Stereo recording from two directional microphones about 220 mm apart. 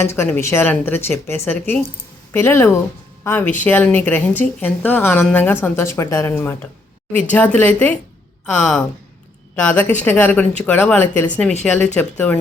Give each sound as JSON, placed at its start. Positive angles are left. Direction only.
{"t": 0.0, "sound": "a woman's voice", "side_deg": 10}